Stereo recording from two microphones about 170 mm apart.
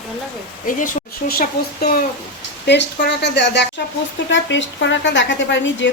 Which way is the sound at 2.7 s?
90° left.